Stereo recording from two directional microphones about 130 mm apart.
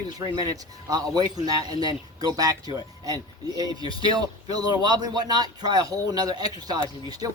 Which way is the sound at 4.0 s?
30° right (ahead or behind).